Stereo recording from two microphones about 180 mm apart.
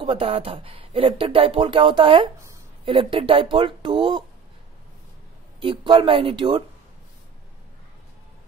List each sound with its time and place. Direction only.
0.0 s speech: 30° right (ahead or behind)
5.6 s speech: 25° right (ahead or behind)